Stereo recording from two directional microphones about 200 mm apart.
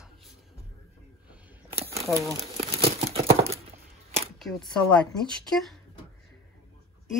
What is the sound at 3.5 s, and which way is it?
Chop, 30° right (ahead or behind).